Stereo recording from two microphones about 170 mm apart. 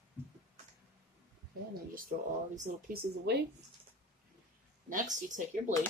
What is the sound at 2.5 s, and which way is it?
Speech, 50° right (ahead or behind).